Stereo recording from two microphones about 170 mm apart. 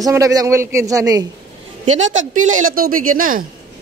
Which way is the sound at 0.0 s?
20° right (ahead or behind).